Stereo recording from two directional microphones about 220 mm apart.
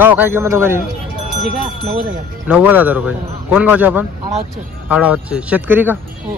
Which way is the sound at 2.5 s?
5° right (ahead or behind).